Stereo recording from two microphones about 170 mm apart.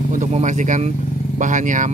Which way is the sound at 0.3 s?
45° right (ahead or behind).